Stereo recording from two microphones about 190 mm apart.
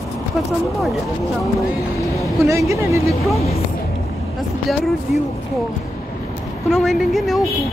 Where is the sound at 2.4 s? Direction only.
15° right (ahead or behind).